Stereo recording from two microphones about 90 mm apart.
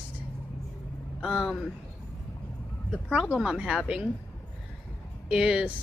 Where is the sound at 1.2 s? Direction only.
5° right (ahead or behind).